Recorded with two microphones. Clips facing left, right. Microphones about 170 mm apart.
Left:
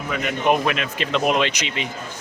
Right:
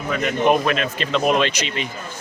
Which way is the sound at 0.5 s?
10° left (ahead or behind).